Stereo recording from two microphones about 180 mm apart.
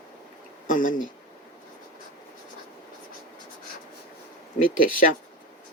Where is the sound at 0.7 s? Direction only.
45° left (ahead or behind).